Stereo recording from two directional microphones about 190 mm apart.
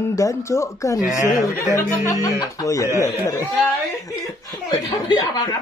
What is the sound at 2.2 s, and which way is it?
Speech, 15° left (ahead or behind).